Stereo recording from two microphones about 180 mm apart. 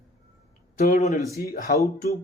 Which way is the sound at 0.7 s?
45° left (ahead or behind).